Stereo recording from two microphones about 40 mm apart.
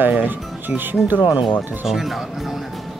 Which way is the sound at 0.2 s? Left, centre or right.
Right.